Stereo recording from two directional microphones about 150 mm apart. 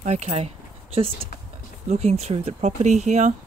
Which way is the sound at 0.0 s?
50° right (ahead or behind).